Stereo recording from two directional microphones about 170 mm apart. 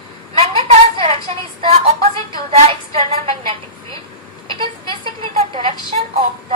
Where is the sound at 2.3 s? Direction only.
35° right (ahead or behind).